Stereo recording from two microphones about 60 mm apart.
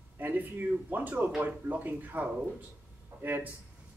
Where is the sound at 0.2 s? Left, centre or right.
Right.